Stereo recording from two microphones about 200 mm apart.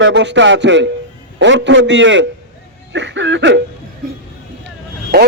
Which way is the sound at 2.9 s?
65° right (ahead or behind).